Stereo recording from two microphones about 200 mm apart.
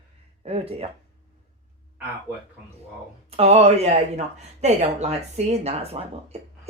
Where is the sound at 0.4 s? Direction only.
30° right (ahead or behind).